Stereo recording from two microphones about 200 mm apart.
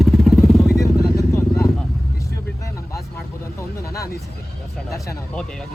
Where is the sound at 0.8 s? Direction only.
15° left (ahead or behind).